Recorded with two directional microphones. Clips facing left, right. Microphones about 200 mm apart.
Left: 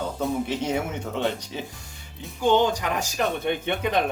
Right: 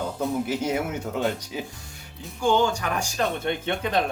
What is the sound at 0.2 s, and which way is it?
Speech, 5° right (ahead or behind).